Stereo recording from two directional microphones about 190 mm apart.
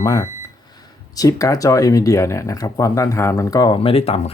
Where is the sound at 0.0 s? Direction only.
20° left (ahead or behind).